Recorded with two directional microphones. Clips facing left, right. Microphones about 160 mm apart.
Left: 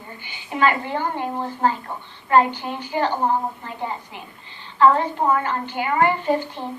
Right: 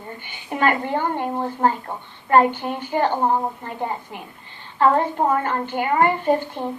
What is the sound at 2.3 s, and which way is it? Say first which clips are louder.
Speech: right 1 dB; 50° right (ahead or behind).